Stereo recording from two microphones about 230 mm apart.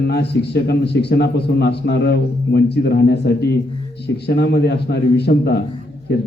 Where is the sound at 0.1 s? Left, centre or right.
Left.